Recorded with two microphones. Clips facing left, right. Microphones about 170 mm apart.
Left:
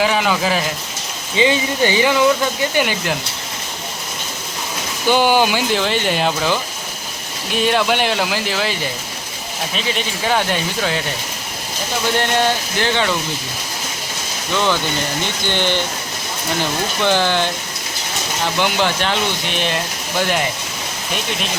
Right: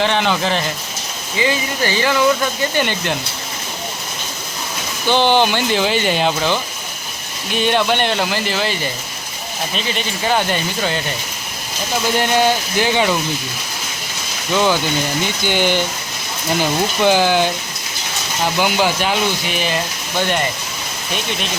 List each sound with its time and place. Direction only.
0.0 s speech: 5° left (ahead or behind)
1.4 s speech: 20° left (ahead or behind)
2.7 s speech: 5° left (ahead or behind)
5.0 s speech: 10° left (ahead or behind)
12.1 s speech: 10° right (ahead or behind)
15.4 s speech: 10° right (ahead or behind)
17.0 s speech: 10° right (ahead or behind)
18.6 s speech: 10° right (ahead or behind)